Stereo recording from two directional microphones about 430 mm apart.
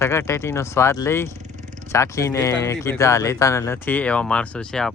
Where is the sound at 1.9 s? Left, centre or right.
Centre.